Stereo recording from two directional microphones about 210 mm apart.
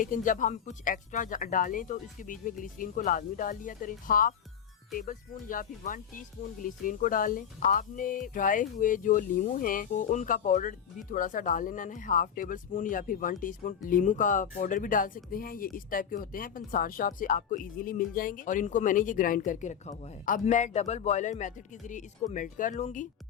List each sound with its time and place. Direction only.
0.0 s speech: 40° left (ahead or behind)